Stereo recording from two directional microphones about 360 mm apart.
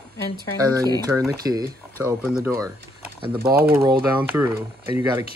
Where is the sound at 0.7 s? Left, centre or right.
Centre.